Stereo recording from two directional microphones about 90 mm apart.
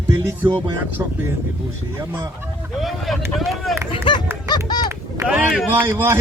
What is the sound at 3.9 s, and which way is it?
Run, 65° left (ahead or behind).